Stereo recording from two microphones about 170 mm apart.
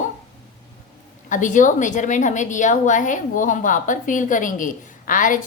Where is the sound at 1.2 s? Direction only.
50° left (ahead or behind).